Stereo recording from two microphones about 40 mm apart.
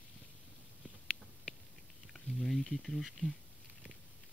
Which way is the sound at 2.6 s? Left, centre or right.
Centre.